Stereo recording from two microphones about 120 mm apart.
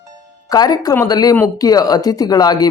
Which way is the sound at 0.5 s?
30° left (ahead or behind).